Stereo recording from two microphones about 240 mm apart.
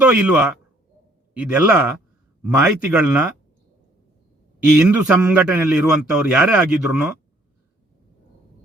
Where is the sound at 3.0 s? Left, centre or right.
Centre.